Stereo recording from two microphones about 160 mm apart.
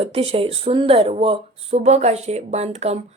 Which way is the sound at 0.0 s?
35° right (ahead or behind).